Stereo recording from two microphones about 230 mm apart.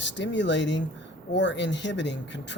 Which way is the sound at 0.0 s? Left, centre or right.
Left.